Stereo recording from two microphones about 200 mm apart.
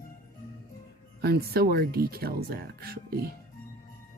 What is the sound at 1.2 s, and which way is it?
Speech, 55° right (ahead or behind).